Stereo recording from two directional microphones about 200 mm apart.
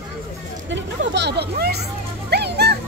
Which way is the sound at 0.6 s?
65° right (ahead or behind).